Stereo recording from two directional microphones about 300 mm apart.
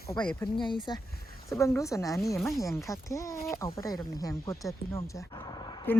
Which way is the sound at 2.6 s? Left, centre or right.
Centre.